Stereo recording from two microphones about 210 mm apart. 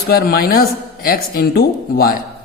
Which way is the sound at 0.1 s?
45° left (ahead or behind).